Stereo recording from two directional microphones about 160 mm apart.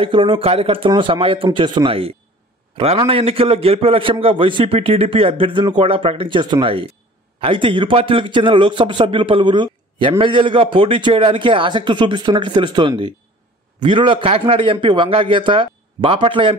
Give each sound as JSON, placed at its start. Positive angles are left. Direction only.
{"t": 0.0, "sound": "a man's voice", "side_deg": -30}